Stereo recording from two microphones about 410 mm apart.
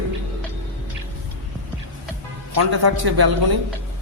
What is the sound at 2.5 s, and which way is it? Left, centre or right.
A man's voice, right.